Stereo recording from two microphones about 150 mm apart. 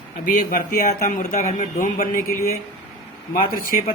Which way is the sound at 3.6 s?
65° left (ahead or behind).